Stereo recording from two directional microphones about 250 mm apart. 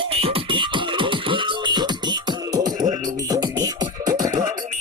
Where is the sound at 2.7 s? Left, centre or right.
Right.